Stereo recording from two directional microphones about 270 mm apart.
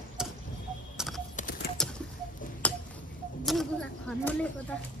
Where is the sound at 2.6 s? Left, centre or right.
Centre.